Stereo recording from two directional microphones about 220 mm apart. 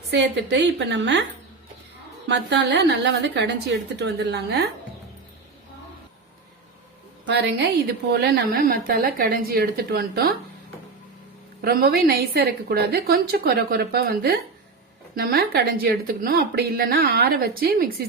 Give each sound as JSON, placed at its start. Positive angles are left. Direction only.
{"t": 0.1, "sound": "a woman's voice", "side_deg": -50}
{"t": 2.2, "sound": "a woman's voice", "side_deg": -50}
{"t": 7.3, "sound": "a woman's voice", "side_deg": -50}
{"t": 8.5, "sound": "a woman's voice", "side_deg": -40}
{"t": 11.6, "sound": "a woman's voice", "side_deg": -45}